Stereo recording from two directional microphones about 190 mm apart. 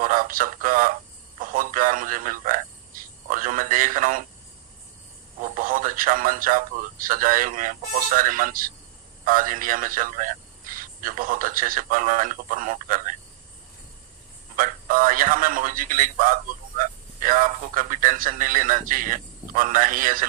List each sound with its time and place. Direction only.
0.0 s speech: 45° right (ahead or behind)
5.4 s speech: 45° right (ahead or behind)
14.5 s speech: 45° right (ahead or behind)